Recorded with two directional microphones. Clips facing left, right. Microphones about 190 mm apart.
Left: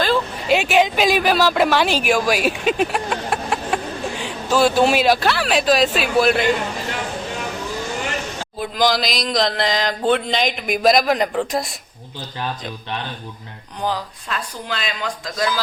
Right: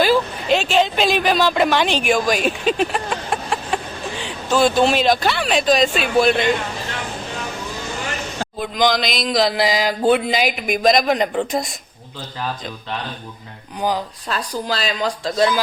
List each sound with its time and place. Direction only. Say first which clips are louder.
0.4 s speech: left 3 dB; 10° left (ahead or behind)
8.5 s speech: even; 5° left (ahead or behind)
14.3 s speech: right 4 dB; 35° right (ahead or behind)